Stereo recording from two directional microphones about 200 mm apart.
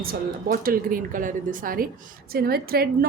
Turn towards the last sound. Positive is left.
turn(degrees=-50)  # may be behind; listen again after turning